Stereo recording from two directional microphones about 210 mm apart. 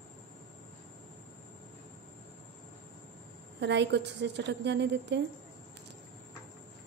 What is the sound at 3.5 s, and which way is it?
A woman's voice, 55° right (ahead or behind).